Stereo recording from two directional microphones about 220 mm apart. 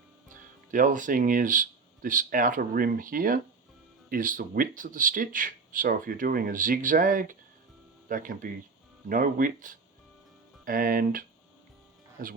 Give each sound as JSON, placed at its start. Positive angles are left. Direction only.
{"t": 0.7, "sound": "speech", "side_deg": -35}